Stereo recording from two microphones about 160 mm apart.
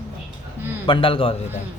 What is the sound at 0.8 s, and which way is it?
Speech, 35° left (ahead or behind).